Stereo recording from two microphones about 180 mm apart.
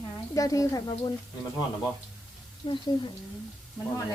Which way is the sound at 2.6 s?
25° left (ahead or behind).